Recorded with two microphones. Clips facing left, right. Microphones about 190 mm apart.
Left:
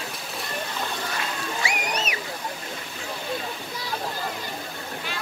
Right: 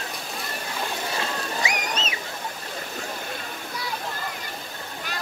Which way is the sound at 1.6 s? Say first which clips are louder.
Left 1 dB; 20° right (ahead or behind).